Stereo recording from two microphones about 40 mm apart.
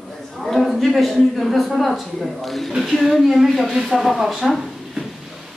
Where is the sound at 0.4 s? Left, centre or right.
Centre.